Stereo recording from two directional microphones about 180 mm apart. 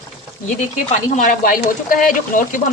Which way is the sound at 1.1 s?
50° left (ahead or behind).